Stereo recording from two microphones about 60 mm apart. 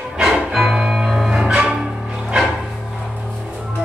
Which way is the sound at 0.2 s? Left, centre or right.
Centre.